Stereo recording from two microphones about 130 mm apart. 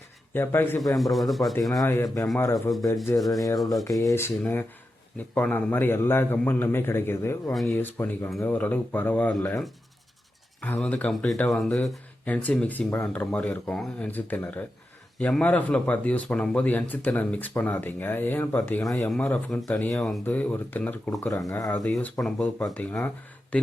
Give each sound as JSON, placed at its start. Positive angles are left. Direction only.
{"t": 0.3, "sound": "speech", "side_deg": 15}
{"t": 0.9, "sound": "speech", "side_deg": 0}
{"t": 1.8, "sound": "speech", "side_deg": 25}
{"t": 3.2, "sound": "speech", "side_deg": 0}
{"t": 4.0, "sound": "speech", "side_deg": 20}
{"t": 10.6, "sound": "speech", "side_deg": 10}
{"t": 20.2, "sound": "speech", "side_deg": 15}
{"t": 21.1, "sound": "speech", "side_deg": 25}
{"t": 21.8, "sound": "speech", "side_deg": 10}